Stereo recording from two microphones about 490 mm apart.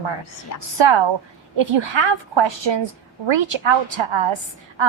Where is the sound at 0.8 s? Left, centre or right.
Right.